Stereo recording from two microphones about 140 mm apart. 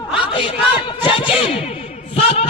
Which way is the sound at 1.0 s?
35° left (ahead or behind).